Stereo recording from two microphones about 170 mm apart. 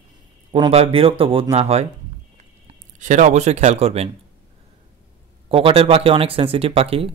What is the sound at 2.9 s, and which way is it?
Speech, 45° right (ahead or behind).